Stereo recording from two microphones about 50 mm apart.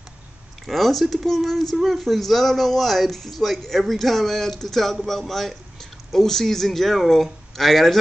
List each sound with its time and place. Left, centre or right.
0.7 s a man's voice: centre